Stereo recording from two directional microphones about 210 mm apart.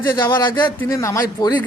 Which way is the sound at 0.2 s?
20° left (ahead or behind).